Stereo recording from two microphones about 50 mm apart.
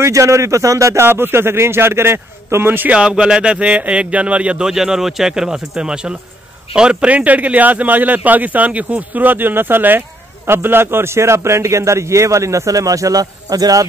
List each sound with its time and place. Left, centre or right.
0.0 s a man's voice: right
1.0 s a man's voice: right
2.9 s speech: right
4.6 s speech: centre
7.1 s a man's voice: right